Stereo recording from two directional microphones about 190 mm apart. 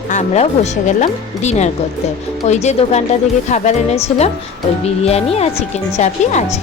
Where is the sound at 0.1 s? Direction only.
35° left (ahead or behind).